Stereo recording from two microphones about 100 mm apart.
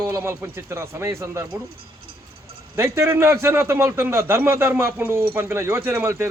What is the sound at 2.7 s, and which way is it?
A man's voice, 25° right (ahead or behind).